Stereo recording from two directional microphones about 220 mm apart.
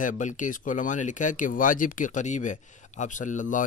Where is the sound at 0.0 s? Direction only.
35° left (ahead or behind).